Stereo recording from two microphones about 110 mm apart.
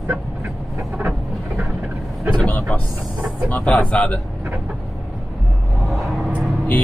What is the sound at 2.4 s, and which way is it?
Vehicle, 10° left (ahead or behind).